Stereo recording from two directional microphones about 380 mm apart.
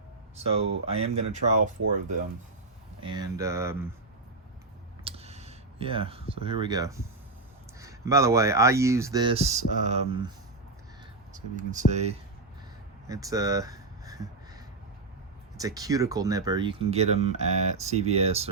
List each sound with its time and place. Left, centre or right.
0.3 s speech: centre
3.0 s speech: centre
5.0 s a sound: centre
7.8 s speech: centre
11.3 s speech: centre
13.1 s a sound: centre
15.5 s speech: centre